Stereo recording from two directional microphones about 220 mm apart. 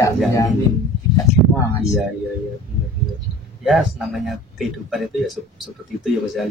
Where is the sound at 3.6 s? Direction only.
Centre (ahead or behind).